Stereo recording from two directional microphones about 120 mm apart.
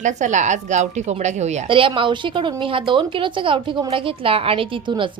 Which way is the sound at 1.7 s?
45° right (ahead or behind).